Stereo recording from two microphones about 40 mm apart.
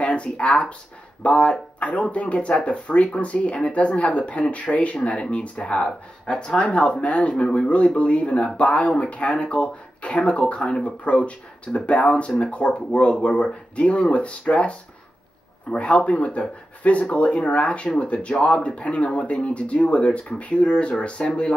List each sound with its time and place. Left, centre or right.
0.0 s speech: left
6.3 s speech: centre
12.1 s speech: centre
12.4 s speech: left